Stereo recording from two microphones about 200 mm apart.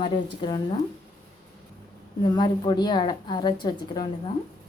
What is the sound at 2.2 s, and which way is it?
A woman's voice, 20° left (ahead or behind).